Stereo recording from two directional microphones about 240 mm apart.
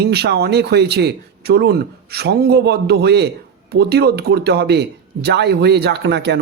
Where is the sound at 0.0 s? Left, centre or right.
Right.